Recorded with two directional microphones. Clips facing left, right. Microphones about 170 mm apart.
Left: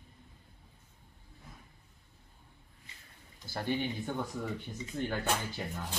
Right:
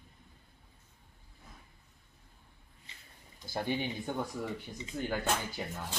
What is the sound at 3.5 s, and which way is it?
Speech, 15° right (ahead or behind).